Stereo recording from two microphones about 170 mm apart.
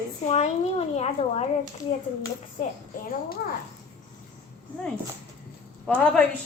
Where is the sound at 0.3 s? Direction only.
40° left (ahead or behind).